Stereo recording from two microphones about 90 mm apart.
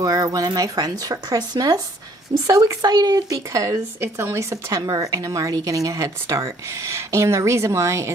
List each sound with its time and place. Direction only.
0.0 s speech: 40° right (ahead or behind)